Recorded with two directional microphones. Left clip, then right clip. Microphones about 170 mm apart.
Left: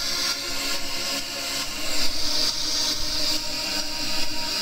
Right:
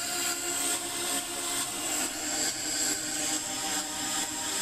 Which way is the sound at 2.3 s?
50° left (ahead or behind).